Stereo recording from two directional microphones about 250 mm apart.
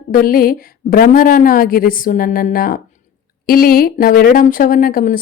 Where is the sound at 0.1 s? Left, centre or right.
Left.